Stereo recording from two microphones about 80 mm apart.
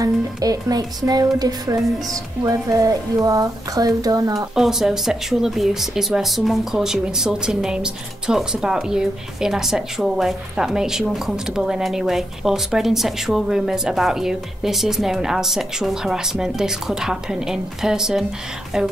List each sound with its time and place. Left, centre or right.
0.0 s speech: right
4.6 s speech: centre